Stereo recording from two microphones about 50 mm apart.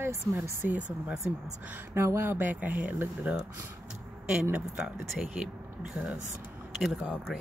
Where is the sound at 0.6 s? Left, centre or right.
Right.